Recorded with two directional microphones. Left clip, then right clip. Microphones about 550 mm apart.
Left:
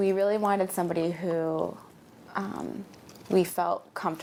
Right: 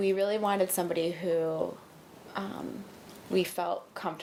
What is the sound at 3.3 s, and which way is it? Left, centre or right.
Speech, centre.